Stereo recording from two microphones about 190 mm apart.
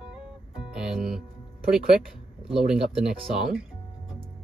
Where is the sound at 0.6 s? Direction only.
Centre (ahead or behind).